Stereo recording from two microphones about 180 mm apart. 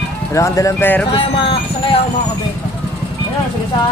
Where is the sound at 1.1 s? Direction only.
30° left (ahead or behind).